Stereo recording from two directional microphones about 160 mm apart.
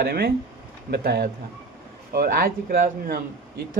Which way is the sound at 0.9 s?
90° right.